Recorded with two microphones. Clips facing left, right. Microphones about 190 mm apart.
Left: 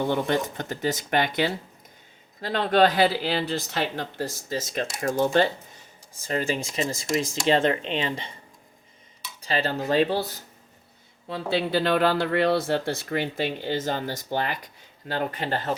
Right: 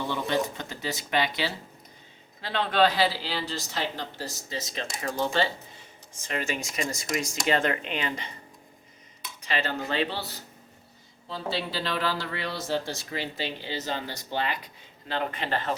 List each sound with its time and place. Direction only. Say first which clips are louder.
0.0 s speech: left 4 dB; 50° left (ahead or behind)
6.2 s speech: left 5 dB; 35° left (ahead or behind)
9.4 s speech: left 4 dB; 35° left (ahead or behind)
11.3 s a man's voice: left 6 dB; 60° left (ahead or behind); by 15.7 s 40° left (ahead or behind)